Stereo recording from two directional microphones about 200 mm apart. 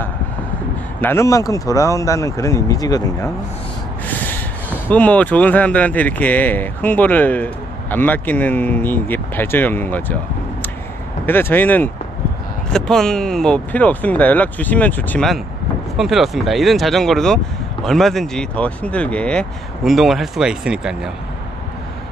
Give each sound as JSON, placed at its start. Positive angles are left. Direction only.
{"t": 1.0, "sound": "speech", "side_deg": 15}
{"t": 4.8, "sound": "speech", "side_deg": 5}
{"t": 11.2, "sound": "speech", "side_deg": 10}